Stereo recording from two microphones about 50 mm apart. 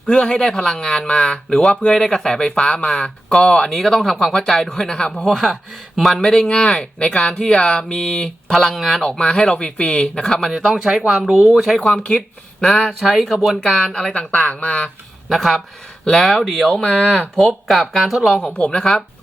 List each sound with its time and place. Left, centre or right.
0.1 s speech: centre
5.3 s speech: centre
7.3 s speech: centre
8.5 s speech: centre
9.0 s speech: centre
10.6 s speech: centre
14.1 s speech: left
15.3 s speech: centre
18.3 s speech: centre